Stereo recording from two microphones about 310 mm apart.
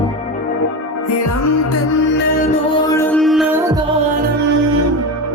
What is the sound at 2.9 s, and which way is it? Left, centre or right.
Music, centre.